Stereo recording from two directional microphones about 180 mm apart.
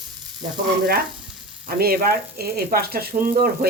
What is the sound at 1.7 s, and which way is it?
Speech, 55° right (ahead or behind).